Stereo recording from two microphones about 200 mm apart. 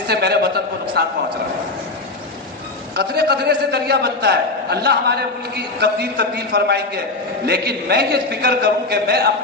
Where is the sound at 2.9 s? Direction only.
55° right (ahead or behind).